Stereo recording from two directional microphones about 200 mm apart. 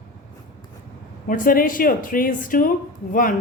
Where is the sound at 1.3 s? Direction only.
45° left (ahead or behind).